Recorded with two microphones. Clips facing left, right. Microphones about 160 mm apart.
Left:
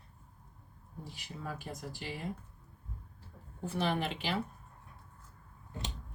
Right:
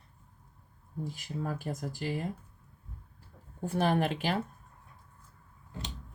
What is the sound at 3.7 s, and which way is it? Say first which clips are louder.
Speech: right 5 dB; 50° right (ahead or behind).